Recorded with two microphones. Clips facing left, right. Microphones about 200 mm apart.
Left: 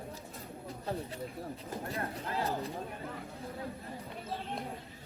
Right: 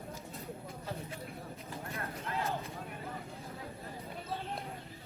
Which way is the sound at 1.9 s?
30° left (ahead or behind).